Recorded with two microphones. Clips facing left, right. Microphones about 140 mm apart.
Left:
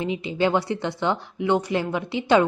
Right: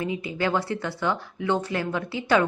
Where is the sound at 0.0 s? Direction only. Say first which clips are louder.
Left 4 dB; 20° left (ahead or behind).